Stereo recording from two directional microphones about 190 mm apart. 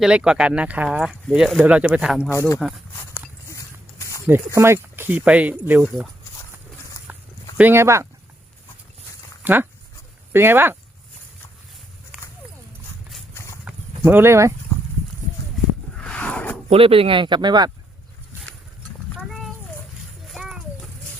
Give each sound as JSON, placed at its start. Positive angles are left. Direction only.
{"t": 0.0, "sound": "speech", "side_deg": -5}
{"t": 2.1, "sound": "speech", "side_deg": 10}
{"t": 3.2, "sound": "a sound", "side_deg": 15}
{"t": 4.3, "sound": "speech", "side_deg": -10}
{"t": 7.1, "sound": "walk", "side_deg": -10}
{"t": 7.6, "sound": "speech", "side_deg": -10}
{"t": 9.4, "sound": "speech", "side_deg": -10}
{"t": 13.3, "sound": "horse", "side_deg": 15}
{"t": 13.7, "sound": "a sound", "side_deg": -10}
{"t": 15.5, "sound": "a sound", "side_deg": 5}
{"t": 16.6, "sound": "speech", "side_deg": -30}
{"t": 20.2, "sound": "a sound", "side_deg": 0}